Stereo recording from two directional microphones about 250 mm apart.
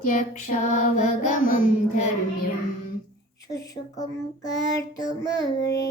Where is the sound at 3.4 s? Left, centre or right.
Centre.